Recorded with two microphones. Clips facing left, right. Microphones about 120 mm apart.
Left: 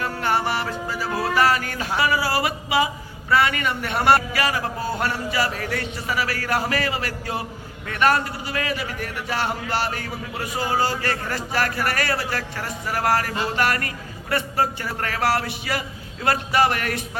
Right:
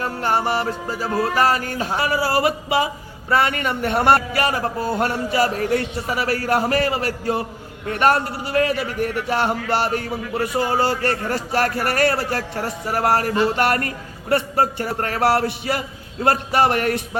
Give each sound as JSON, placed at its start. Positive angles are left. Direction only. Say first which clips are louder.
{"t": 0.0, "sound": "a man's voice", "louder": "right 2 dB", "side_deg": -40}
{"t": 12.8, "sound": "a man's voice", "louder": "right 3 dB", "side_deg": -35}
{"t": 16.2, "sound": "a man's voice", "louder": "right 3 dB", "side_deg": -50}